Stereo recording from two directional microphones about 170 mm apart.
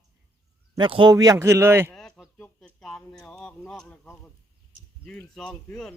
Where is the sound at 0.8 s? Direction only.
30° right (ahead or behind); by 1.9 s 15° right (ahead or behind).